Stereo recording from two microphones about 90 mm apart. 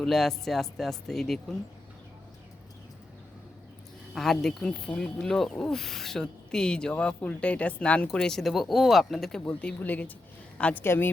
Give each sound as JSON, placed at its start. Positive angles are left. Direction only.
{"t": 0.0, "sound": "speech", "side_deg": 5}
{"t": 4.1, "sound": "speech", "side_deg": 5}
{"t": 9.4, "sound": "speech", "side_deg": 15}
{"t": 10.8, "sound": "a woman's voice", "side_deg": 25}